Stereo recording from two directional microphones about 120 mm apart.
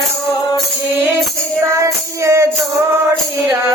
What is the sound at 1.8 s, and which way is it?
Music, 25° right (ahead or behind).